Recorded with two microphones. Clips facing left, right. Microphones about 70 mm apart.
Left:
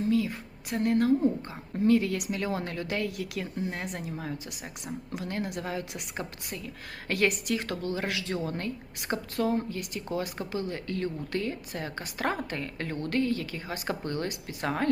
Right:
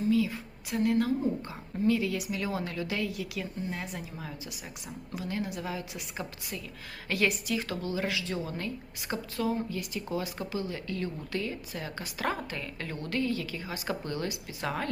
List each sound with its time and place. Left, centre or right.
0.1 s a sound: left
0.9 s a woman's voice: left
2.3 s a woman's voice: left